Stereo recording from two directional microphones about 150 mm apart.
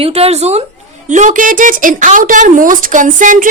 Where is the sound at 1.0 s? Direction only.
55° right (ahead or behind).